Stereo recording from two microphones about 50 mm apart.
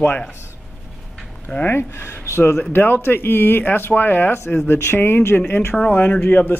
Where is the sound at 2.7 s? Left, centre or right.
Left.